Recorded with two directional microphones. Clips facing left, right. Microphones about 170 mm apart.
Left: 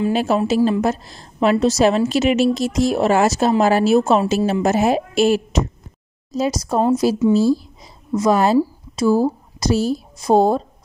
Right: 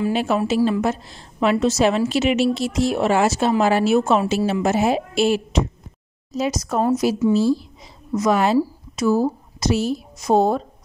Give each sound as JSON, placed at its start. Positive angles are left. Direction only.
{"t": 0.1, "sound": "a woman's voice", "side_deg": 40}